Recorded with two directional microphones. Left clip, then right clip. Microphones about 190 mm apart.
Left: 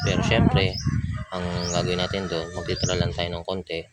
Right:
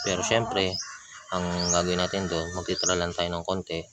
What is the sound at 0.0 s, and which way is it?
Speech, 10° right (ahead or behind).